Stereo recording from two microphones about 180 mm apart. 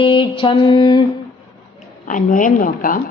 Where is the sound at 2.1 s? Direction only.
45° left (ahead or behind).